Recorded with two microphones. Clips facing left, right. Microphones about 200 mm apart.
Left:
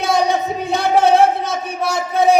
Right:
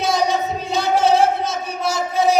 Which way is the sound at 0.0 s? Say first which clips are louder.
Left 2 dB; 55° left (ahead or behind).